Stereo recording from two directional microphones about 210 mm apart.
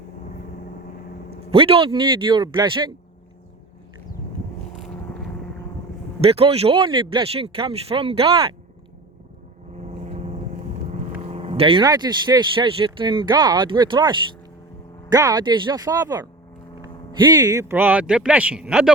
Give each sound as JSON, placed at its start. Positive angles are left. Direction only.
{"t": 1.3, "sound": "speech", "side_deg": -25}
{"t": 6.2, "sound": "speech", "side_deg": -30}
{"t": 9.9, "sound": "vehicle", "side_deg": -30}
{"t": 11.2, "sound": "speech", "side_deg": -30}